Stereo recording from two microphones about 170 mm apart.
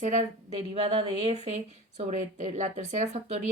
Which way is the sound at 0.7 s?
35° right (ahead or behind).